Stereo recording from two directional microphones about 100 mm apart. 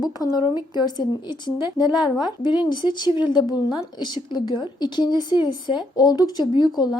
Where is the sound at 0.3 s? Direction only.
45° left (ahead or behind).